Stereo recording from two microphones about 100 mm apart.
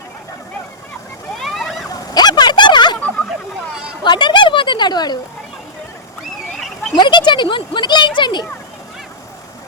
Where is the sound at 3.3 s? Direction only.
5° right (ahead or behind).